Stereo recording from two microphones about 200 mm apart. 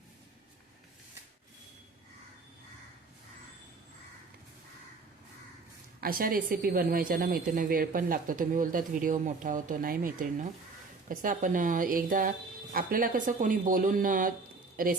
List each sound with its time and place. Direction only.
6.0 s a woman's voice: 45° right (ahead or behind)